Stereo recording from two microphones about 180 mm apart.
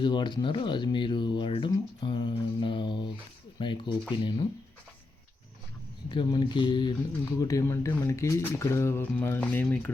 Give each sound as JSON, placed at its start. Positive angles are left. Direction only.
{"t": 0.0, "sound": "speech", "side_deg": 25}
{"t": 6.1, "sound": "speech", "side_deg": 25}